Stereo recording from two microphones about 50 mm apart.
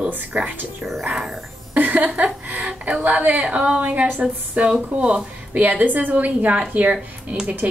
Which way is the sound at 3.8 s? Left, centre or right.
Right.